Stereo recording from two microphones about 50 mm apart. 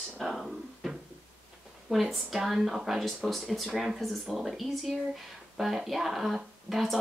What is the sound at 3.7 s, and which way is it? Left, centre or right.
Speech, centre.